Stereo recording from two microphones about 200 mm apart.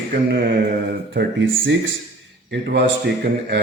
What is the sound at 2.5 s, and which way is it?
A man's voice, 60° right (ahead or behind).